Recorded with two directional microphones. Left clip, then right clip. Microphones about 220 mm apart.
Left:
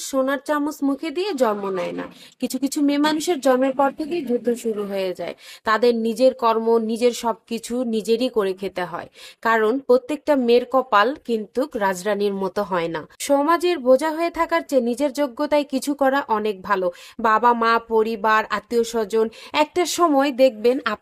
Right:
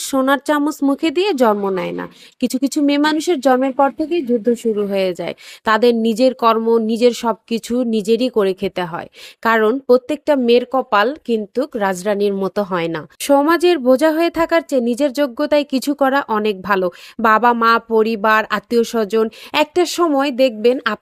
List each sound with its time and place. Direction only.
0.0 s a woman's voice: 30° right (ahead or behind)